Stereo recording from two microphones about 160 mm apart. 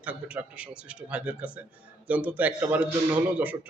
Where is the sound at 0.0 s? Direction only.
10° right (ahead or behind).